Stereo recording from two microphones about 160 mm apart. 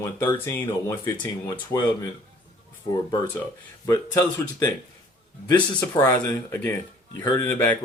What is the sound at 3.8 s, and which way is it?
Speech, 15° left (ahead or behind).